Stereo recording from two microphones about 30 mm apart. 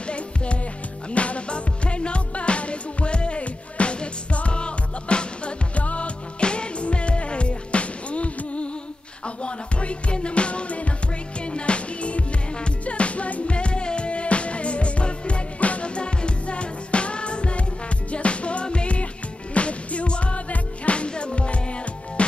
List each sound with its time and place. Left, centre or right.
0.0 s music: left